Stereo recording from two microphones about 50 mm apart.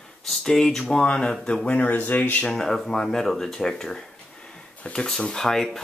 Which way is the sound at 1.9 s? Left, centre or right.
Left.